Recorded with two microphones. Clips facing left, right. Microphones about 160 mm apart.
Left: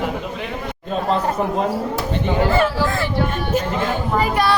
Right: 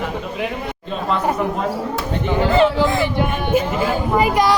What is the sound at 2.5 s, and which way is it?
Speech, 20° right (ahead or behind).